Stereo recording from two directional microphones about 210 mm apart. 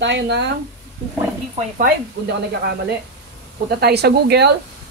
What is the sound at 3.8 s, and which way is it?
Speech, 50° right (ahead or behind).